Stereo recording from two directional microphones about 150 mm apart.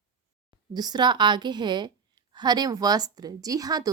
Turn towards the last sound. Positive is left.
turn(degrees=-25)  # may be behind; listen again after turning